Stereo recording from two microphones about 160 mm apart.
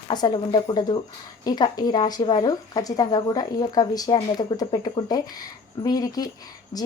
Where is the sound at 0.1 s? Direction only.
25° left (ahead or behind).